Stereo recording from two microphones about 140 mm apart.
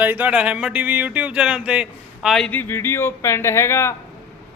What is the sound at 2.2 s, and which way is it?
Speech, 5° left (ahead or behind).